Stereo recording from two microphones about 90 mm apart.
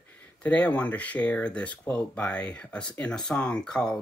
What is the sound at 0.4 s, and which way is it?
Speech, 15° left (ahead or behind).